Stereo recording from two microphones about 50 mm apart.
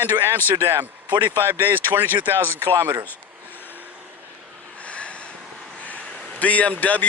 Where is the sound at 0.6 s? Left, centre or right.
Right.